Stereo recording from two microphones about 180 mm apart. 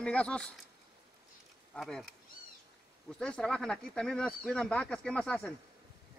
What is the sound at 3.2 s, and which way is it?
Speech, 5° left (ahead or behind).